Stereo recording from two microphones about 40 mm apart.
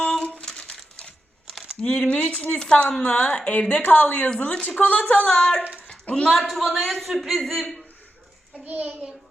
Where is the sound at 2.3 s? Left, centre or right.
Left.